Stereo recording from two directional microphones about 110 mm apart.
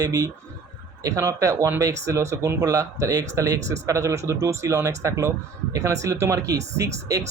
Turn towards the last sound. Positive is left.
turn(degrees=-30)  # may be behind; listen again after turning